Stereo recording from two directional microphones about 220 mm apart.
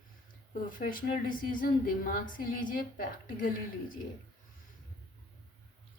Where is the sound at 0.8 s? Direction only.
40° left (ahead or behind).